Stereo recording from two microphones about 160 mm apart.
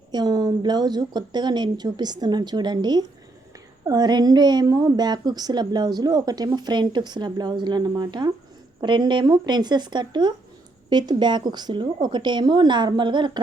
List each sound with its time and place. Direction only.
0.1 s a woman's voice: 25° right (ahead or behind)